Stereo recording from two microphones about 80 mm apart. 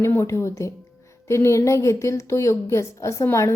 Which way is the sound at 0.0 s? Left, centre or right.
Left.